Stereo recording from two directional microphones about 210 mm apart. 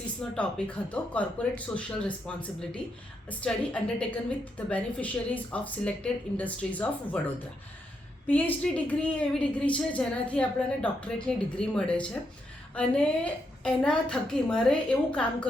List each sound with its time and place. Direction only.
0.2 s a woman's voice: 5° left (ahead or behind)
8.3 s a woman's voice: 5° left (ahead or behind)